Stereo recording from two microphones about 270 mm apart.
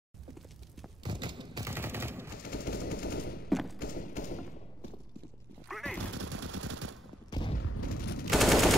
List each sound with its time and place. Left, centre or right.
1.0 s fusillade: centre
2.4 s machine gun: left
3.4 s a sound: centre
3.8 s clip-clop: left
5.7 s gunshot: centre
6.1 s machine gun: right
7.2 s a sound: centre
7.6 s boom: left
8.3 s machine gun: centre